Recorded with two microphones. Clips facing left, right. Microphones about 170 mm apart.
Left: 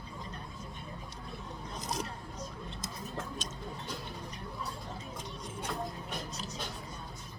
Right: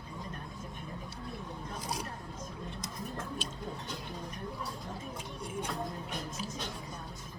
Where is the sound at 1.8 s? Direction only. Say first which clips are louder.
Left 2 dB; 10° right (ahead or behind).